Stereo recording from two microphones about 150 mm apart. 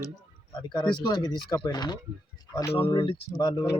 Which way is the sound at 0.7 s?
25° left (ahead or behind).